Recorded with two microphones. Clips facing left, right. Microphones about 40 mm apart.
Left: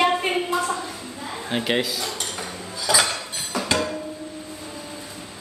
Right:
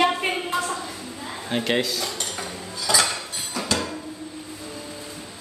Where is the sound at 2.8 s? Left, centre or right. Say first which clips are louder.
Left 1 dB; centre.